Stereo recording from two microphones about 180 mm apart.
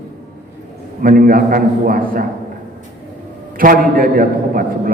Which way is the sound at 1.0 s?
50° right (ahead or behind).